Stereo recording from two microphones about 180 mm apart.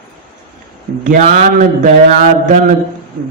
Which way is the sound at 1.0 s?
45° right (ahead or behind).